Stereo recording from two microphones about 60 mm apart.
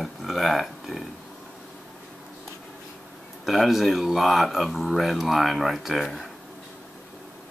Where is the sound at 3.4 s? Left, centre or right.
Centre.